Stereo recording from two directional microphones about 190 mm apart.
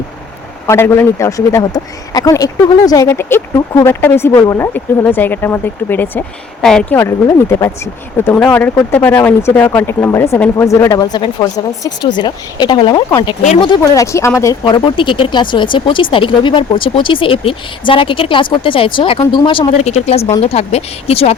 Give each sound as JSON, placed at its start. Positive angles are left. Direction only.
{"t": 0.7, "sound": "speech", "side_deg": 15}
{"t": 6.9, "sound": "speech", "side_deg": 15}